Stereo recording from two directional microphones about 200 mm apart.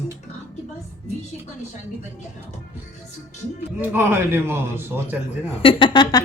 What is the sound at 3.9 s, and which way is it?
A man's voice, 10° right (ahead or behind).